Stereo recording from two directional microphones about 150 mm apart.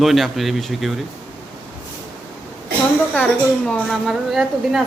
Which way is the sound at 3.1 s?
5° left (ahead or behind).